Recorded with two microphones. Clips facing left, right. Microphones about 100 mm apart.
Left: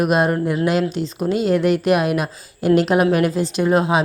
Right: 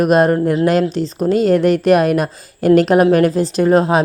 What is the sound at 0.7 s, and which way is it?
A woman's voice, 40° right (ahead or behind).